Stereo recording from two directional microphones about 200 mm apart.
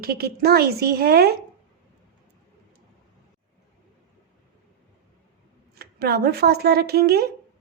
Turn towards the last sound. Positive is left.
turn(degrees=-50)  # may be behind; listen again after turning